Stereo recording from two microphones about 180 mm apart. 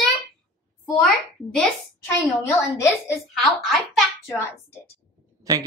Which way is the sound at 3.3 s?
Centre (ahead or behind).